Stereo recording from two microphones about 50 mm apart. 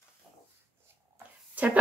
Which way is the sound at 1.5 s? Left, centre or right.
Right.